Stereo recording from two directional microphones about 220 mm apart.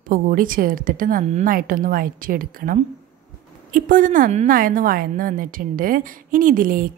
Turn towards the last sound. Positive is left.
turn(degrees=-40)  # may be behind; listen again after turning